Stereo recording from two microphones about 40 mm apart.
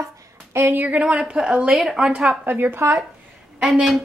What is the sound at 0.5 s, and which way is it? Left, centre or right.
A woman's voice, right.